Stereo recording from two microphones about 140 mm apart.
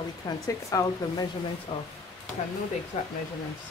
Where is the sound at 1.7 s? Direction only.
40° left (ahead or behind).